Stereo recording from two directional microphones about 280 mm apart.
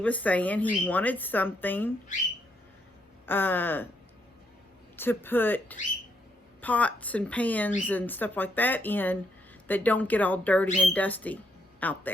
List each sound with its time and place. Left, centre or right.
0.0 s a woman's voice: centre
3.2 s speech: centre
4.9 s a woman's voice: centre